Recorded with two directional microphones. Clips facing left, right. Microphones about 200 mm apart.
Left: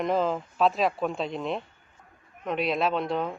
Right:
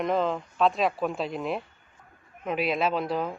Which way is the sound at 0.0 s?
Centre (ahead or behind).